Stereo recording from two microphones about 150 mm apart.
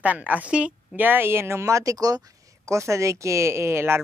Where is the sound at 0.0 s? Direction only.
10° right (ahead or behind).